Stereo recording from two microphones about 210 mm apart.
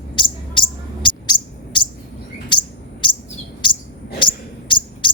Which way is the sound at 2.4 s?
25° left (ahead or behind).